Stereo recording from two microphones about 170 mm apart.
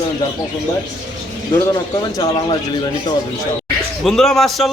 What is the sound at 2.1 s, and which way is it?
Speech, 25° left (ahead or behind).